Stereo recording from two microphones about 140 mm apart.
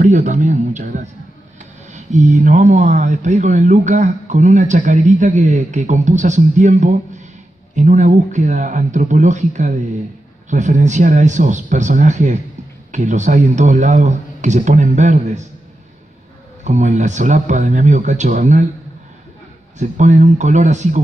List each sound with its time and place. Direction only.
0.0 s a man's voice: 55° right (ahead or behind)
16.6 s a man's voice: 60° right (ahead or behind)
19.8 s a man's voice: 60° right (ahead or behind)